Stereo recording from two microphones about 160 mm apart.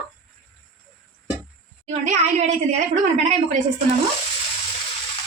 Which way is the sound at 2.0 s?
50° right (ahead or behind).